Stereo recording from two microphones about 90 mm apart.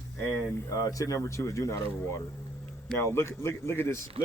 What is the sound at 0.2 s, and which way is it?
Speech, centre (ahead or behind).